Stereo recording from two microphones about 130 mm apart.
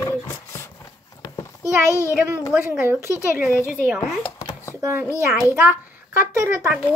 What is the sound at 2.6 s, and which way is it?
Speech, 20° right (ahead or behind).